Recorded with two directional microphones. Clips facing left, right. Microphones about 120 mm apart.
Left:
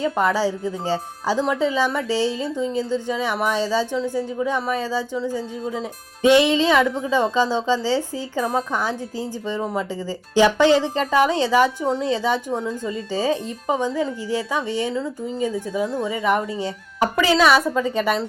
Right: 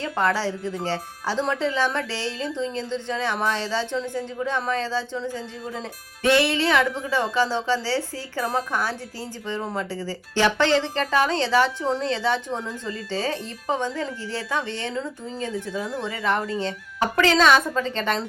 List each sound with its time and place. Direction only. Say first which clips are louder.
0.0 s speech: left 4 dB; 15° left (ahead or behind)